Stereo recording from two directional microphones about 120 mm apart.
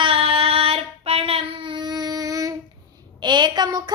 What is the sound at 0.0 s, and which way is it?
Child singing, 50° right (ahead or behind).